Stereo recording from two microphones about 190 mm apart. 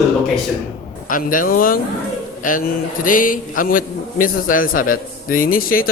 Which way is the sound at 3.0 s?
45° left (ahead or behind).